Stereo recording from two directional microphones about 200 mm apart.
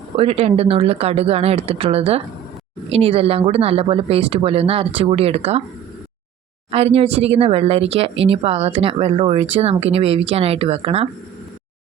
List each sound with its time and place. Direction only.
0.2 s speech: 30° right (ahead or behind)
6.7 s speech: 30° right (ahead or behind)